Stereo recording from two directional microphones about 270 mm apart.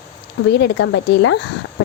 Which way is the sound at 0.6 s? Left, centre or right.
Left.